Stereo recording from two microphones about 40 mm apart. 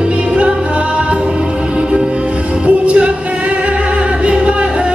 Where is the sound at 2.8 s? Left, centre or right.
Right.